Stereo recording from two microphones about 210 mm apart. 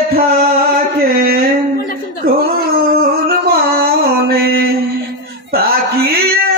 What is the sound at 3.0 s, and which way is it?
Music, 45° right (ahead or behind).